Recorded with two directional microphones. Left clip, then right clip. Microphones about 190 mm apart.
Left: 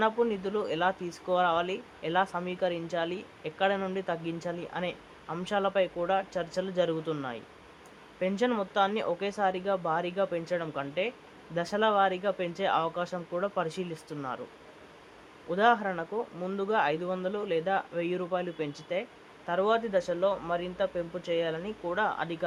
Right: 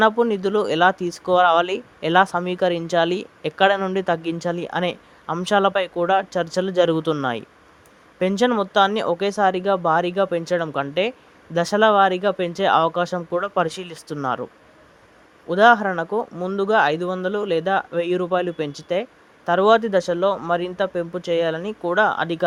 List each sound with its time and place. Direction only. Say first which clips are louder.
0.0 s speech: right 10 dB; 40° right (ahead or behind)
8.2 s speech: right 9 dB; 40° right (ahead or behind)
15.4 s speech: right 11 dB; 40° right (ahead or behind)